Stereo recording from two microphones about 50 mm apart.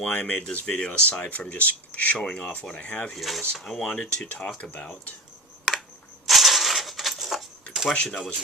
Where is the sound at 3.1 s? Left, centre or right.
Centre.